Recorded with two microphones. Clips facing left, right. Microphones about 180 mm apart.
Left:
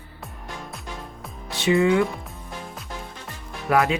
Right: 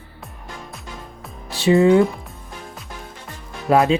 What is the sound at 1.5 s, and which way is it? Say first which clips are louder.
Speech: right 5 dB; 35° right (ahead or behind).